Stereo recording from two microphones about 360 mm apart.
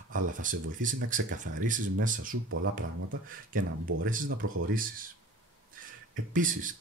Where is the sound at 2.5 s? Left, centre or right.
Right.